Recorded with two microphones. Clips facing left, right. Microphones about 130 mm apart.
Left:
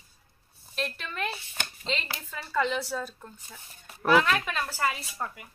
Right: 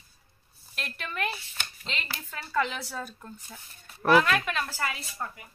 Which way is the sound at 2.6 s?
Centre (ahead or behind).